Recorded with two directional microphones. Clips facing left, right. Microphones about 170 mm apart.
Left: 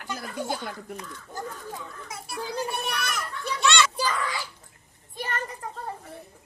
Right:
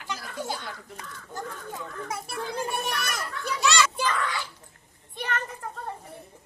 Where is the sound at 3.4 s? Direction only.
Centre (ahead or behind).